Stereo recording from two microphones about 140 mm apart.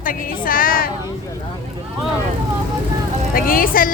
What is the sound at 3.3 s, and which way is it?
Speech, 90° left.